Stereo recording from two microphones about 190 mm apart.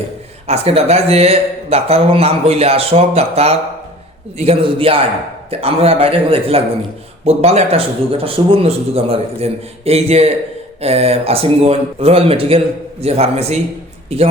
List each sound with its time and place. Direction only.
0.4 s a man's voice: 30° right (ahead or behind)